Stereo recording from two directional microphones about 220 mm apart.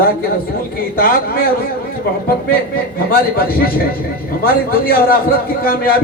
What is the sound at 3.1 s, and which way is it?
A man's voice, 40° left (ahead or behind).